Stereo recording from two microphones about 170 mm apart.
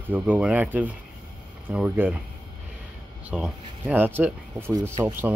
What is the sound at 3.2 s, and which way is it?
Speech, 5° right (ahead or behind).